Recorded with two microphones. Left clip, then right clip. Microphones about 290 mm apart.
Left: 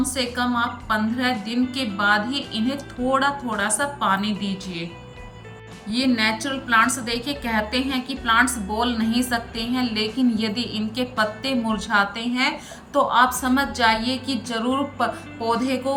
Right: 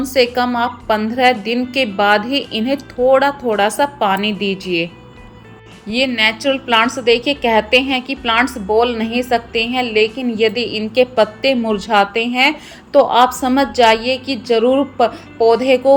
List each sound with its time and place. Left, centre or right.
0.0 s speech: centre
5.9 s speech: centre